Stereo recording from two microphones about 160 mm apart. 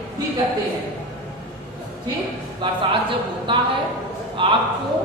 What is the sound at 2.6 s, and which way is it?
A woman's voice, 30° right (ahead or behind).